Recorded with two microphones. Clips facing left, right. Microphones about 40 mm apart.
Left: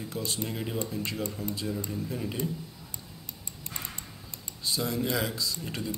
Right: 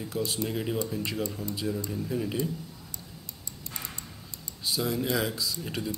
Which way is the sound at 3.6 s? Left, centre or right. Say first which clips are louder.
Even; left.